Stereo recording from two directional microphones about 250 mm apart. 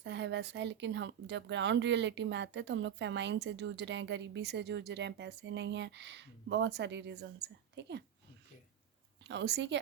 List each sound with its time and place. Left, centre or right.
0.0 s speech: right
9.2 s speech: right